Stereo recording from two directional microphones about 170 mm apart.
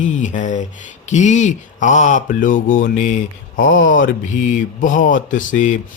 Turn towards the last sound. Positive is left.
turn(degrees=50)  # may be behind; listen again after turning